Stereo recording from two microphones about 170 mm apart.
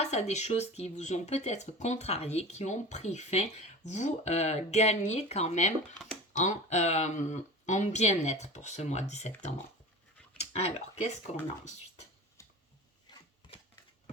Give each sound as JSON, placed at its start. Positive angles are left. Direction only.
{"t": 0.0, "sound": "speech", "side_deg": 40}